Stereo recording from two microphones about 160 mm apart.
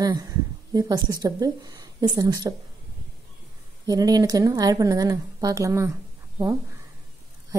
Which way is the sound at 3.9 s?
20° right (ahead or behind).